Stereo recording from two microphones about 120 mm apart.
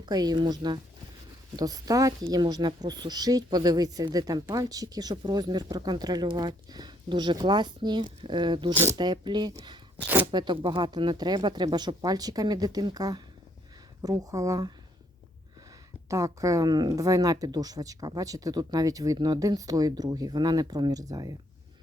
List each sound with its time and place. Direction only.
0.0 s speech: 35° right (ahead or behind)
8.7 s speech: 20° right (ahead or behind)
9.0 s speech: 35° right (ahead or behind)
10.0 s speech: 15° right (ahead or behind)
10.3 s speech: 40° right (ahead or behind)
16.0 s speech: 25° right (ahead or behind)